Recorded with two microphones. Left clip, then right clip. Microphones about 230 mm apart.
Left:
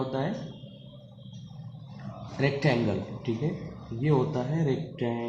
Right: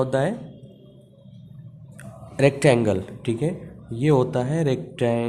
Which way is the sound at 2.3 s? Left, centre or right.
Right.